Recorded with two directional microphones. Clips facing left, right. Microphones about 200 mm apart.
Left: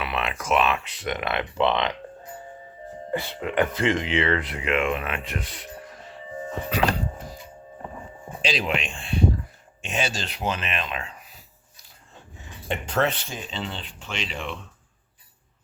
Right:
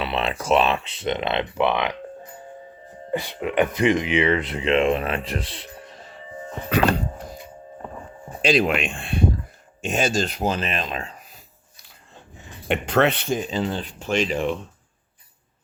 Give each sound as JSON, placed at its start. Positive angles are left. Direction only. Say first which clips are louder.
{"t": 0.0, "sound": "speech", "louder": "right 4 dB", "side_deg": -30}
{"t": 3.1, "sound": "speech", "louder": "right 3 dB", "side_deg": -15}
{"t": 8.4, "sound": "speech", "louder": "right 7 dB", "side_deg": -50}
{"t": 12.6, "sound": "speech", "louder": "right 5 dB", "side_deg": -70}
{"t": 13.5, "sound": "speech", "louder": "right 8 dB", "side_deg": -40}